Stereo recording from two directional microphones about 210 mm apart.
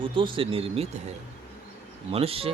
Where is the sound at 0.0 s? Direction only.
25° right (ahead or behind).